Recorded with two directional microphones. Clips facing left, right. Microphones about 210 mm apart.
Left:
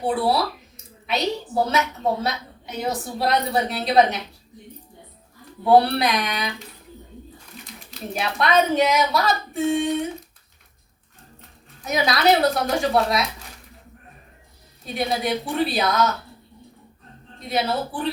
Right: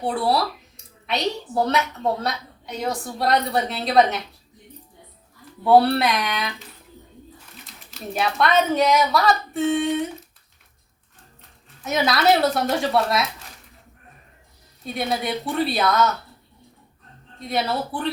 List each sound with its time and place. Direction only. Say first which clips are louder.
0.0 s a woman's voice: left 1 dB; centre (ahead or behind)
5.6 s a woman's voice: right 1 dB; centre (ahead or behind)
7.6 s speech: even; centre (ahead or behind)
11.9 s a woman's voice: even; centre (ahead or behind)
14.9 s a woman's voice: left 2 dB; centre (ahead or behind)
17.4 s a woman's voice: left 1 dB; centre (ahead or behind)